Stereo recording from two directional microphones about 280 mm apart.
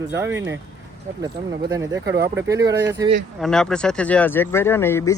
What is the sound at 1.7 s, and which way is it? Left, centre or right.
Speech, centre.